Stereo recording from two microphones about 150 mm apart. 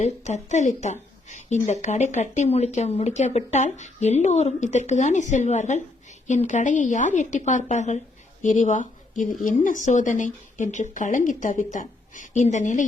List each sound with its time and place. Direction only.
0.4 s speech: 50° left (ahead or behind)